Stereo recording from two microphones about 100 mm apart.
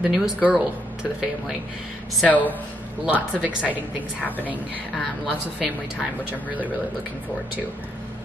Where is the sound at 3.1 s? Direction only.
10° right (ahead or behind).